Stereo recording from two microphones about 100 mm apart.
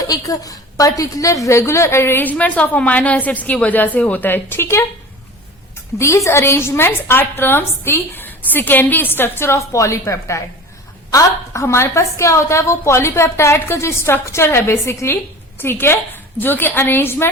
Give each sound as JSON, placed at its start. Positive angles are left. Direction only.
{"t": 0.0, "sound": "a woman's voice", "side_deg": 40}
{"t": 6.0, "sound": "a woman's voice", "side_deg": 30}